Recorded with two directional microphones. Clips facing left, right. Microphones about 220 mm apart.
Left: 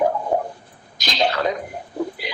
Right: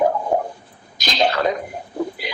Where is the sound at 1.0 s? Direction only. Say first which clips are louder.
Right 2 dB; 50° right (ahead or behind).